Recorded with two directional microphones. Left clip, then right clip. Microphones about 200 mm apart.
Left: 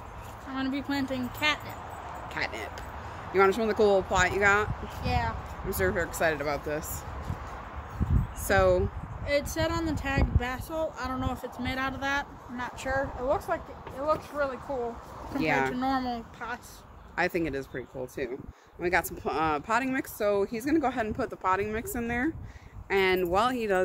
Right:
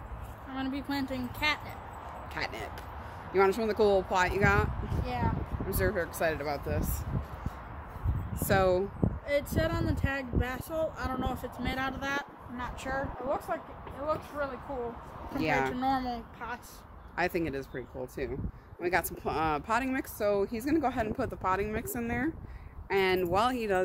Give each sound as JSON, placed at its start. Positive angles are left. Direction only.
{"t": 0.6, "sound": "speech", "side_deg": 15}
{"t": 2.3, "sound": "speech", "side_deg": -15}
{"t": 5.0, "sound": "speech", "side_deg": 45}
{"t": 5.7, "sound": "speech", "side_deg": -5}
{"t": 8.5, "sound": "speech", "side_deg": -15}
{"t": 9.2, "sound": "speech", "side_deg": 15}
{"t": 15.4, "sound": "speech", "side_deg": -5}
{"t": 15.7, "sound": "speech", "side_deg": 30}
{"t": 17.1, "sound": "speech", "side_deg": -5}